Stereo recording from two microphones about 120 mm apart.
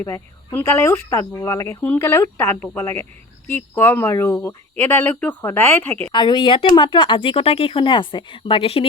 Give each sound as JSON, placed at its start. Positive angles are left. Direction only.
{"t": 0.0, "sound": "speech", "side_deg": 20}
{"t": 6.1, "sound": "speech", "side_deg": 40}